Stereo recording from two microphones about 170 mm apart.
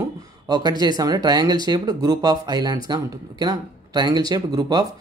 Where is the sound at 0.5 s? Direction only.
25° right (ahead or behind).